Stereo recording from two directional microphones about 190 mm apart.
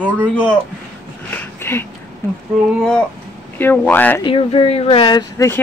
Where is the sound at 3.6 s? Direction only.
10° left (ahead or behind).